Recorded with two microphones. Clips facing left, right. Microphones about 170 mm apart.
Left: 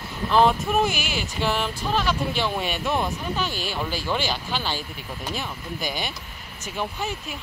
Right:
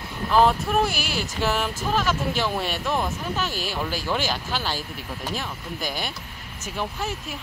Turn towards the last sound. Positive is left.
turn(degrees=0)  # may be behind; listen again after turning